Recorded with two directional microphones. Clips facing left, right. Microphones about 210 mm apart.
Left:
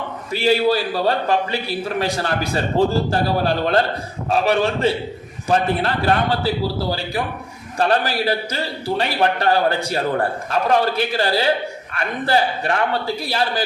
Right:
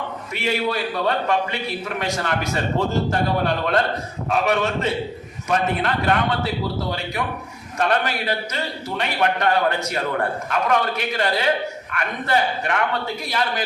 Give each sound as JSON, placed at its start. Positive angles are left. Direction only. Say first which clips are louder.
{"t": 0.3, "sound": "a man's voice", "louder": "left 6 dB", "side_deg": 30}